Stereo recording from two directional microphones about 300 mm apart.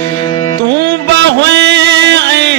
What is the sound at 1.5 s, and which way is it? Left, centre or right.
Music, right.